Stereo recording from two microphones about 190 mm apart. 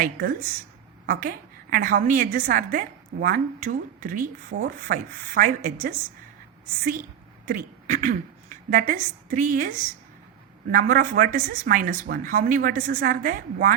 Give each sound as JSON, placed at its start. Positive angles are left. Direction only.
{"t": 0.0, "sound": "a woman's voice", "side_deg": -50}
{"t": 7.4, "sound": "a woman's voice", "side_deg": -45}